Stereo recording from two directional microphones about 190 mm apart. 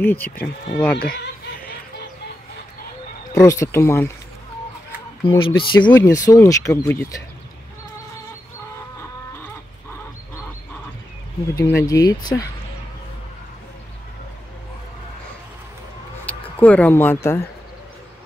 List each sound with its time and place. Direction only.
0.0 s speech: 10° left (ahead or behind)
0.9 s speech: 50° left (ahead or behind)
3.3 s speech: 15° left (ahead or behind)
5.2 s speech: 25° left (ahead or behind)
11.5 s speech: 15° left (ahead or behind)
16.3 s speech: 10° left (ahead or behind)